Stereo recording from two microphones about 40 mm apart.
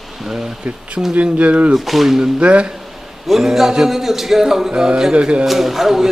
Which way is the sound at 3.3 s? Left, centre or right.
Centre.